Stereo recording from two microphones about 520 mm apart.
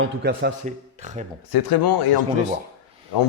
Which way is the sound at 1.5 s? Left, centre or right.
Left.